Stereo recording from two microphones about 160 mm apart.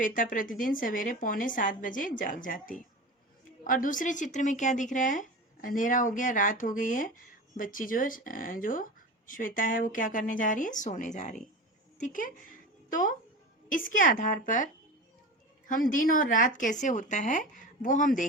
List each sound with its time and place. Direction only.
0.0 s a woman's voice: 55° left (ahead or behind)